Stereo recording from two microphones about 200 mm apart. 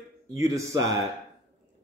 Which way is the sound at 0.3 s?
15° right (ahead or behind).